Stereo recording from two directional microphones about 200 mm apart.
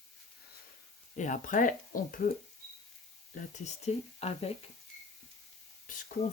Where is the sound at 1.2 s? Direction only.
40° left (ahead or behind).